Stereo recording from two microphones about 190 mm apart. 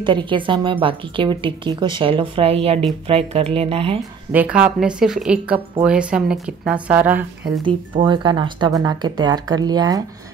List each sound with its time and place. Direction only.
0.0 s a woman's voice: 25° right (ahead or behind)
4.0 s a woman's voice: 5° right (ahead or behind)
7.6 s a woman's voice: 25° right (ahead or behind)